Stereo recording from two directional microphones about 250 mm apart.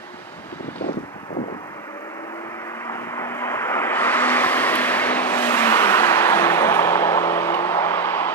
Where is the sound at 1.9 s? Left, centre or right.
Centre.